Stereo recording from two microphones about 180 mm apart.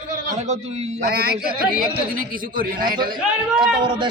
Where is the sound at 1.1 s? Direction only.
60° right (ahead or behind).